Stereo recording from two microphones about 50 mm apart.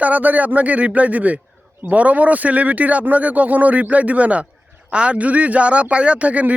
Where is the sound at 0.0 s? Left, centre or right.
Right.